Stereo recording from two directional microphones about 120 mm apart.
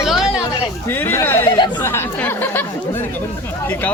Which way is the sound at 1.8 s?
20° left (ahead or behind).